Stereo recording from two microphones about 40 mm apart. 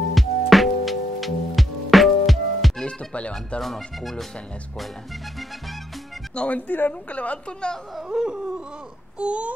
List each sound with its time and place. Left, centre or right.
0.1 s music: centre
2.8 s music: left
3.6 s speech: centre
6.3 s speech: left
6.7 s a woman's voice: left
8.1 s a sound: right